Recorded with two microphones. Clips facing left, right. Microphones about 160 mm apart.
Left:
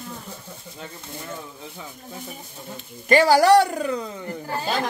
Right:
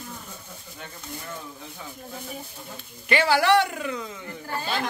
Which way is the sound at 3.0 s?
40° left (ahead or behind).